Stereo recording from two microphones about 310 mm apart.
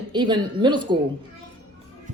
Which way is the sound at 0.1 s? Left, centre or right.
Centre.